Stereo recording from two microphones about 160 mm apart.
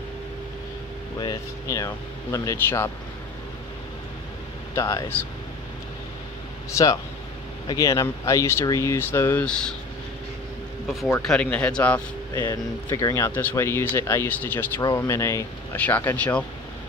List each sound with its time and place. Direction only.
1.2 s speech: 20° left (ahead or behind)
4.7 s speech: 25° left (ahead or behind)
7.6 s speech: 20° left (ahead or behind); by 9.8 s 5° left (ahead or behind)
10.9 s speech: centre (ahead or behind)
12.4 s speech: 20° left (ahead or behind)